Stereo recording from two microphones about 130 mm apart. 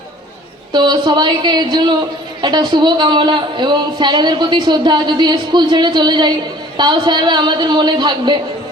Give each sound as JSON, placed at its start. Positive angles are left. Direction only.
{"t": 0.7, "sound": "a woman's voice", "side_deg": -35}